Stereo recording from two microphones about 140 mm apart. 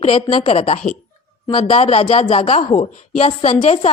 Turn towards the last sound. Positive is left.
turn(degrees=45)  # may be behind; listen again after turning